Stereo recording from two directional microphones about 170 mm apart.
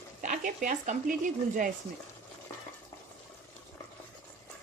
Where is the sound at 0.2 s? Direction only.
50° right (ahead or behind).